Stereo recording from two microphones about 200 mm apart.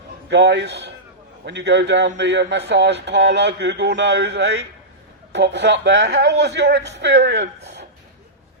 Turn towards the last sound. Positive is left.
turn(degrees=-60)  # may be behind; listen again after turning